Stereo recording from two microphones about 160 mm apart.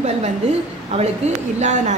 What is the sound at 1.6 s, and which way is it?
Speech, 45° right (ahead or behind).